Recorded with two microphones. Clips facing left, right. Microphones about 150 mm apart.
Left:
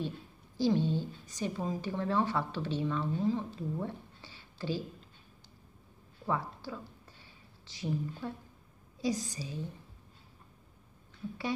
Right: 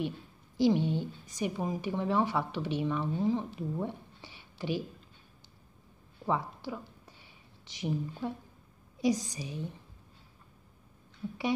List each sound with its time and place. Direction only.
0.6 s a woman's voice: 15° right (ahead or behind)
6.2 s a sound: 15° right (ahead or behind)
7.6 s a woman's voice: 15° right (ahead or behind)